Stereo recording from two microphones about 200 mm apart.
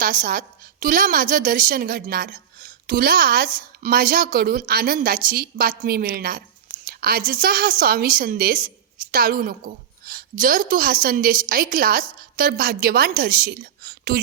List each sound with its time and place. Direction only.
0.0 s a woman's voice: 45° right (ahead or behind)